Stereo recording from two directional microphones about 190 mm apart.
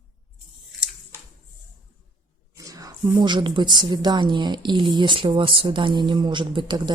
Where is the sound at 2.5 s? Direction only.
20° right (ahead or behind).